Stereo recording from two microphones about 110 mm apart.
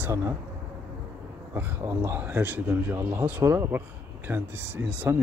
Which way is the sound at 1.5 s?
20° right (ahead or behind).